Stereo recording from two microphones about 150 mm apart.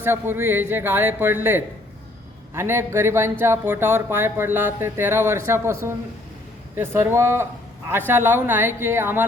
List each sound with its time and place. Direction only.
0.0 s speech: 15° right (ahead or behind)